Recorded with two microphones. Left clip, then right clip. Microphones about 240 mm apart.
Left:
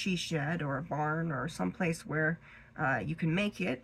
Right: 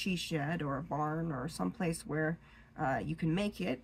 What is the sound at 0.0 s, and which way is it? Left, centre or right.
Speech, left.